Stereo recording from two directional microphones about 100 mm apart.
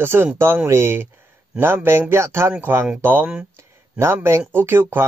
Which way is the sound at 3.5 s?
25° right (ahead or behind).